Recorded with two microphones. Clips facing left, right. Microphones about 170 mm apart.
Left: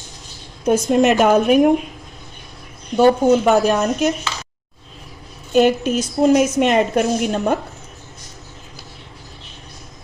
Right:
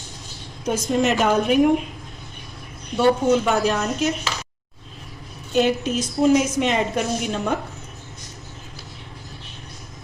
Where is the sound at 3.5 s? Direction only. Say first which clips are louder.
Left 6 dB; 55° left (ahead or behind).